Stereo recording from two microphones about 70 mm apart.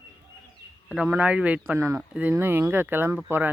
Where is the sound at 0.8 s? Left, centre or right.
Centre.